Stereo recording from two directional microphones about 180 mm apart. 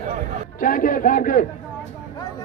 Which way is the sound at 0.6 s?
50° left (ahead or behind).